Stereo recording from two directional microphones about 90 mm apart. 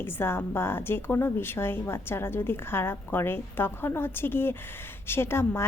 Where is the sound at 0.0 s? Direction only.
25° left (ahead or behind).